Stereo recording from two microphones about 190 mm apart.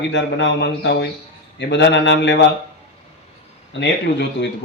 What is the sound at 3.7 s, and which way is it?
Speech, 65° left (ahead or behind).